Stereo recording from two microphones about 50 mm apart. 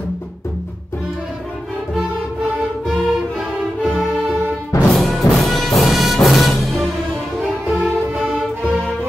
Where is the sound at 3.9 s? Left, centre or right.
Right.